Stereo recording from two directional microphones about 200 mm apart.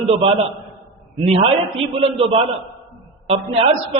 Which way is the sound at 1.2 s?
30° right (ahead or behind).